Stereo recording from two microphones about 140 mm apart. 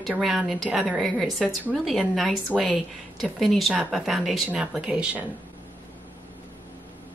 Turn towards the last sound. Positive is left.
turn(degrees=-10)  # may be behind; listen again after turning